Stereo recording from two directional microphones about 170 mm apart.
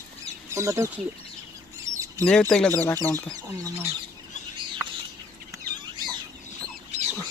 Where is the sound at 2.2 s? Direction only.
5° left (ahead or behind).